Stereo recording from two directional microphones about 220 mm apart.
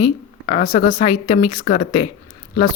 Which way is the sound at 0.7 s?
30° left (ahead or behind).